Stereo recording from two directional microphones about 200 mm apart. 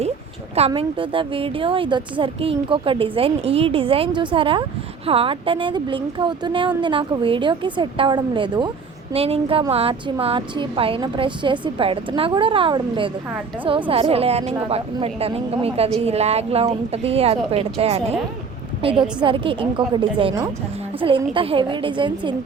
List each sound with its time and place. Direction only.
0.5 s a woman's voice: 30° right (ahead or behind)